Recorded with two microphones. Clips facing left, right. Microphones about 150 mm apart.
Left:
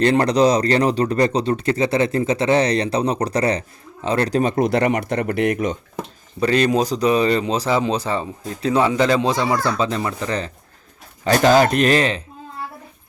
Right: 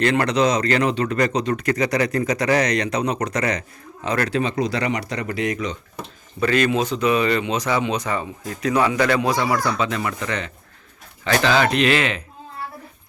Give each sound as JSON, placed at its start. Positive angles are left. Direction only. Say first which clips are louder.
{"t": 0.0, "sound": "speech", "louder": "left 3 dB", "side_deg": 30}
{"t": 4.4, "sound": "speech", "louder": "left 4 dB", "side_deg": 50}
{"t": 6.4, "sound": "speech", "louder": "left 2 dB", "side_deg": 35}